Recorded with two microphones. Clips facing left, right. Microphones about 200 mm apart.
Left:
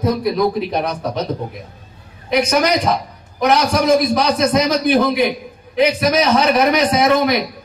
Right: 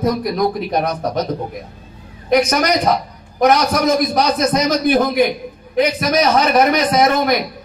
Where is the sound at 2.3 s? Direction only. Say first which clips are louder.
Right 1 dB; 50° right (ahead or behind).